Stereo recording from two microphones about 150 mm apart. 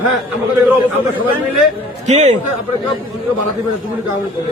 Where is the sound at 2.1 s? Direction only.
50° right (ahead or behind).